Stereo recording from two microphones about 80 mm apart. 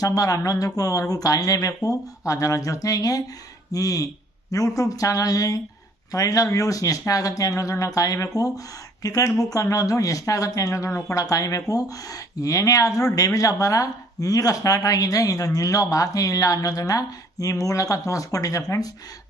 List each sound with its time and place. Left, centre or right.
0.0 s speech: left